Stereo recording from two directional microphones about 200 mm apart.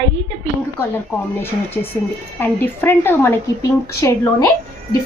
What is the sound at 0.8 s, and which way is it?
Speech, 10° left (ahead or behind).